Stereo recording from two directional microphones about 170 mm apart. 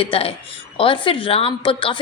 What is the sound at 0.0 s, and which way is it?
A woman's voice, 35° left (ahead or behind).